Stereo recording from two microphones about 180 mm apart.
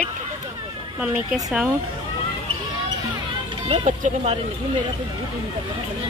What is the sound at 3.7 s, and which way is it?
Speech, 40° right (ahead or behind).